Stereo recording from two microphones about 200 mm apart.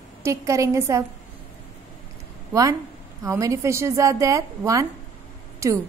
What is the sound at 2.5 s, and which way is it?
A woman's voice, 15° right (ahead or behind).